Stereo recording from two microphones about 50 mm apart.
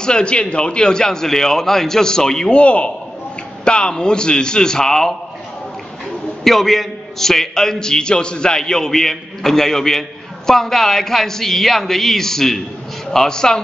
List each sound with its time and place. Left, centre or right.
0.0 s a man's voice: centre
2.5 s a man's voice: left
6.4 s a man's voice: centre